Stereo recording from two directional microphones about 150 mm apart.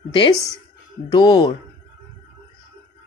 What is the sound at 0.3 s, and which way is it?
Speech, 20° right (ahead or behind).